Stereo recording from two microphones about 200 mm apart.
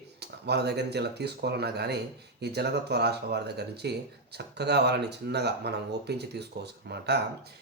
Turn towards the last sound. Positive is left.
turn(degrees=-55)  # may be behind; listen again after turning